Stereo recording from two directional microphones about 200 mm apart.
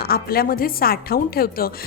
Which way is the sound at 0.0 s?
50° left (ahead or behind).